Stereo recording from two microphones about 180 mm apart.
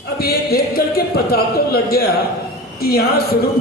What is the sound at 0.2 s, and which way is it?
Speech, 60° left (ahead or behind).